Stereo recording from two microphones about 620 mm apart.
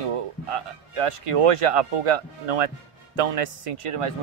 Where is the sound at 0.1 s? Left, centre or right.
Right.